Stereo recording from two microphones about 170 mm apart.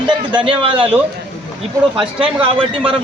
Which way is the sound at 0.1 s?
25° right (ahead or behind).